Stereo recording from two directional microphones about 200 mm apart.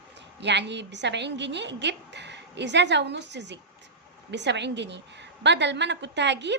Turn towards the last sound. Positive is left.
turn(degrees=-60)  # may be behind; listen again after turning